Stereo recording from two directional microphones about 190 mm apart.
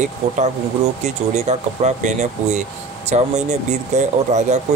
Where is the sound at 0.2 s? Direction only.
35° right (ahead or behind).